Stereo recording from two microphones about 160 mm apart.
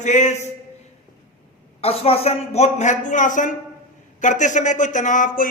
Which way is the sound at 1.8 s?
40° left (ahead or behind).